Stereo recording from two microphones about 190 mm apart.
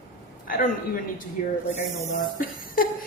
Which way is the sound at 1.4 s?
45° left (ahead or behind).